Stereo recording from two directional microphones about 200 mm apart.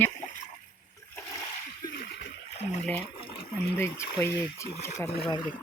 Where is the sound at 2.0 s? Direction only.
55° left (ahead or behind).